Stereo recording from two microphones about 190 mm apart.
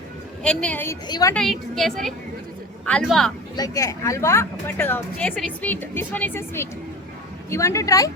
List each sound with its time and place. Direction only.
0.4 s speech: 5° left (ahead or behind)
1.0 s a woman's voice: 20° left (ahead or behind)
1.3 s a woman's voice: centre (ahead or behind)
3.5 s speech: 20° left (ahead or behind)